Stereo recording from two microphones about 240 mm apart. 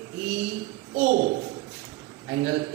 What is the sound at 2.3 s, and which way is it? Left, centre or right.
Speech, centre.